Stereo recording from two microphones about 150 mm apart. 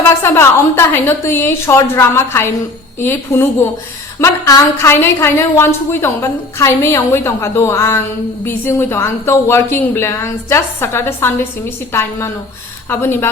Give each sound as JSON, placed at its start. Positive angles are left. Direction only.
{"t": 0.2, "sound": "a woman's voice", "side_deg": 15}